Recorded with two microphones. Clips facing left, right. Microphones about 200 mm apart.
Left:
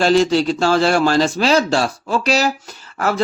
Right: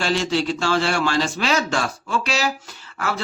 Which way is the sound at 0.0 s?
40° left (ahead or behind).